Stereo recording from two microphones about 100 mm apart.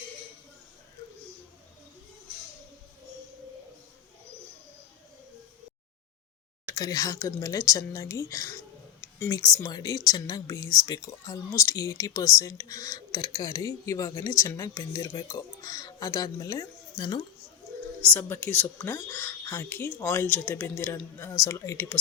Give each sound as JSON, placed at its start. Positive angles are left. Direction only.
{"t": 6.7, "sound": "a woman's voice", "side_deg": 35}
{"t": 9.0, "sound": "a sound", "side_deg": 25}
{"t": 9.4, "sound": "a woman's voice", "side_deg": 40}
{"t": 13.7, "sound": "a woman's voice", "side_deg": 30}
{"t": 18.0, "sound": "a woman's voice", "side_deg": 20}